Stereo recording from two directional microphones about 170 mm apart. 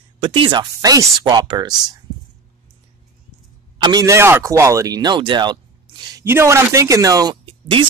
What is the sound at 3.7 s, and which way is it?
Speech, 25° right (ahead or behind).